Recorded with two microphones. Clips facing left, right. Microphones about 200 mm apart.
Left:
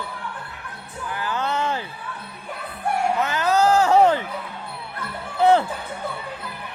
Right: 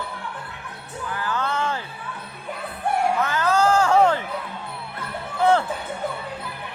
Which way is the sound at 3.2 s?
15° left (ahead or behind).